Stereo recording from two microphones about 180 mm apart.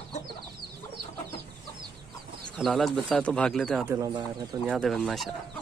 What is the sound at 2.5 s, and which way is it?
Speech, centre (ahead or behind).